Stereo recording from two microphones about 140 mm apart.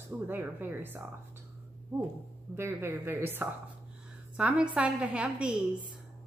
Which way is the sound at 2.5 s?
15° right (ahead or behind).